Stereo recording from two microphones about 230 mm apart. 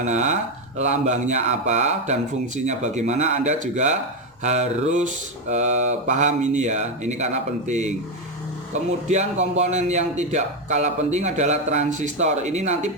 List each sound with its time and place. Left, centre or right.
0.0 s speech: right
9.0 s speech: right